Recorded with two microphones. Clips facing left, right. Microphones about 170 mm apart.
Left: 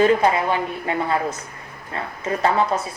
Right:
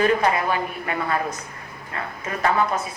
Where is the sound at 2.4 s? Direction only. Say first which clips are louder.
Left 1 dB; 30° left (ahead or behind).